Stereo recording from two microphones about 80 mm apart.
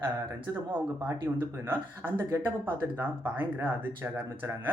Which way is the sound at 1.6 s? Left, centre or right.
Right.